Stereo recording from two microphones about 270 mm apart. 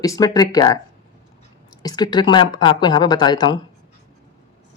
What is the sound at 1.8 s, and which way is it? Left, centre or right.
Speech, centre.